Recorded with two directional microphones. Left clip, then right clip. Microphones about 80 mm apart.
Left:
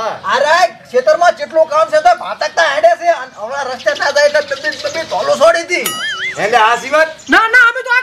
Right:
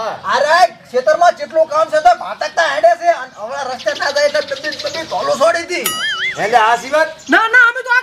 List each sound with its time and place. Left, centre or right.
0.0 s a man's voice: centre
4.6 s a sound: right
5.1 s speech: centre